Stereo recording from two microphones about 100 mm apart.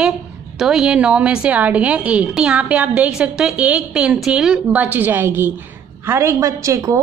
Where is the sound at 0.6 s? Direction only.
5° right (ahead or behind).